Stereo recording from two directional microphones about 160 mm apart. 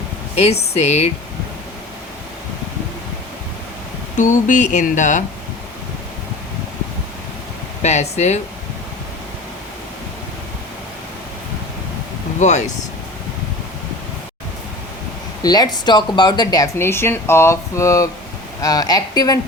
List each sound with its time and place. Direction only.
0.7 s speech: 45° left (ahead or behind)
4.2 s speech: 50° left (ahead or behind)
7.8 s speech: 45° left (ahead or behind)
12.4 s speech: 50° left (ahead or behind)
15.4 s speech: 25° left (ahead or behind)